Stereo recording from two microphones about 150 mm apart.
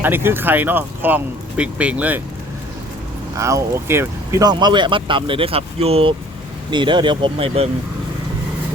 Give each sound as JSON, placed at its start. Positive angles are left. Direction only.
{"t": 0.0, "sound": "speech", "side_deg": -15}
{"t": 3.3, "sound": "speech", "side_deg": -20}